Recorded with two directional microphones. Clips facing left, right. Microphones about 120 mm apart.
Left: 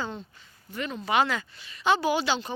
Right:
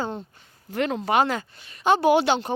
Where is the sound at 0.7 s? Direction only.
90° right.